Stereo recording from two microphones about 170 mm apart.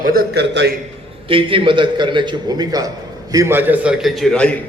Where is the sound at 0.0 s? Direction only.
60° right (ahead or behind); by 0.7 s 80° right.